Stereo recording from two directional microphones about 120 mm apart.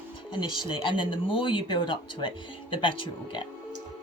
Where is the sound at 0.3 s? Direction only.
45° left (ahead or behind).